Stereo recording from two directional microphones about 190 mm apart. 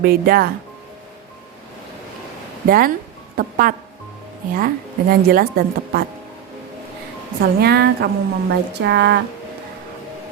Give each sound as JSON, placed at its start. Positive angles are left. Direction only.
{"t": 0.0, "sound": "a woman's voice", "side_deg": -50}
{"t": 2.6, "sound": "a woman's voice", "side_deg": -50}
{"t": 7.6, "sound": "speech", "side_deg": -55}